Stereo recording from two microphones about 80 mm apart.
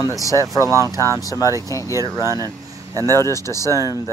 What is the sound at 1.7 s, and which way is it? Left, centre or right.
Speech, left.